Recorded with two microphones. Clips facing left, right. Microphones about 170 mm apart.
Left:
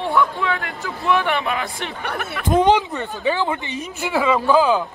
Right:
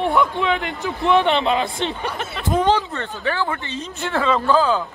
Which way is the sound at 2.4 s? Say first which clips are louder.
Left 3 dB; 15° left (ahead or behind).